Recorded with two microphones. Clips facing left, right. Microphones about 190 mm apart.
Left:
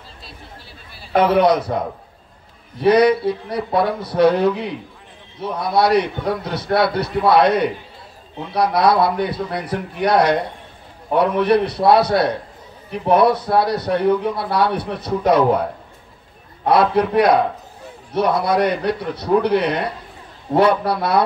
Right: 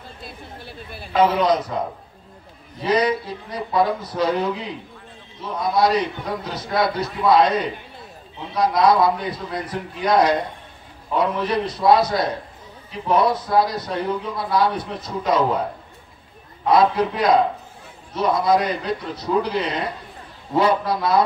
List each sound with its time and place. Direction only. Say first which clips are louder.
0.2 s speech: right 4 dB; 55° right (ahead or behind)
1.1 s speech: left 3 dB; 65° left (ahead or behind)
2.8 s a man's voice: left 7 dB; 65° left (ahead or behind)
16.6 s speech: left 1 dB; 65° left (ahead or behind)